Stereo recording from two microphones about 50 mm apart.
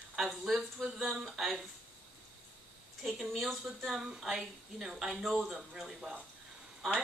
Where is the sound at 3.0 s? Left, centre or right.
Centre.